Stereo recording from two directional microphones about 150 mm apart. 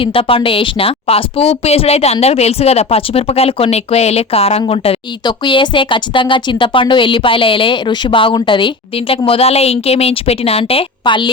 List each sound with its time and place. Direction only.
0.0 s speech: 35° left (ahead or behind)